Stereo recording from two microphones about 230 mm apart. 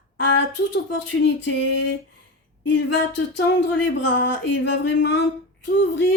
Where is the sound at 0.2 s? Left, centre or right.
Left.